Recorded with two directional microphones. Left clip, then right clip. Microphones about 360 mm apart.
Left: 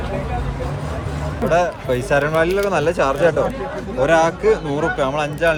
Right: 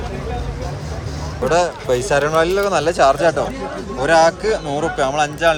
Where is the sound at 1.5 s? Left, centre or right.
Centre.